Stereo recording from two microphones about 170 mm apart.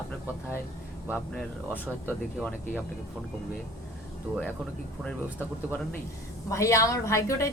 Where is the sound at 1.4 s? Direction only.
10° left (ahead or behind).